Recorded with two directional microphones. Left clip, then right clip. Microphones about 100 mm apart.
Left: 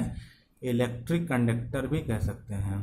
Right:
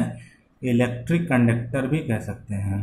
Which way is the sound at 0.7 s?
20° left (ahead or behind).